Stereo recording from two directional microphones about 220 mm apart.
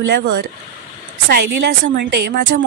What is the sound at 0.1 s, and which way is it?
Speech, 50° right (ahead or behind).